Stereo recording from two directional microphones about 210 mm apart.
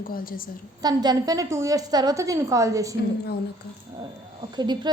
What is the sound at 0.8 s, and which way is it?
A woman's voice, 20° right (ahead or behind).